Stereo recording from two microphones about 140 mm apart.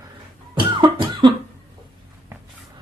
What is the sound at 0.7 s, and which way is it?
Cough, 35° right (ahead or behind).